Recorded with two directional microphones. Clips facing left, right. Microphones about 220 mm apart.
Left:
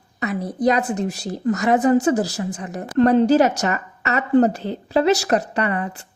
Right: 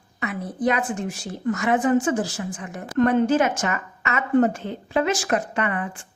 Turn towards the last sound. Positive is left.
turn(degrees=40)  # may be behind; listen again after turning